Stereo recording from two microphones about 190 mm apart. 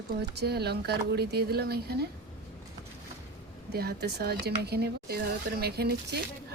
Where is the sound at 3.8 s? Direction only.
60° right (ahead or behind).